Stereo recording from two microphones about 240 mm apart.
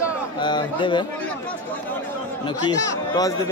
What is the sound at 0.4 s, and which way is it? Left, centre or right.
Speech, centre.